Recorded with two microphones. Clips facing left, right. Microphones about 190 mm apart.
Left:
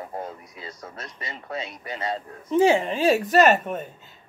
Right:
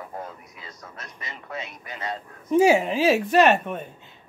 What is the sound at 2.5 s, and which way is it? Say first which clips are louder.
Speech: right 1 dB; 10° right (ahead or behind).